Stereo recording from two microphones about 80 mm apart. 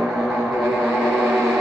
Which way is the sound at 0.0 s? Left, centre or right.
Centre.